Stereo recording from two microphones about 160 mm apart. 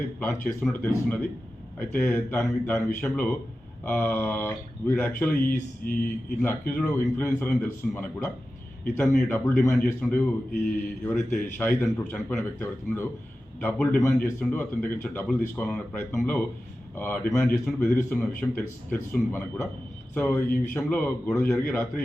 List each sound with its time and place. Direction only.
0.2 s speech: 10° left (ahead or behind)
5.4 s speech: 60° left (ahead or behind)
6.4 s speech: 15° left (ahead or behind)